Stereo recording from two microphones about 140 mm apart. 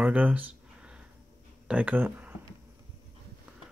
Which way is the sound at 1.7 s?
10° right (ahead or behind).